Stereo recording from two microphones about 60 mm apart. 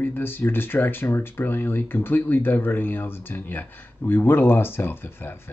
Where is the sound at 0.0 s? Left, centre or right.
Left.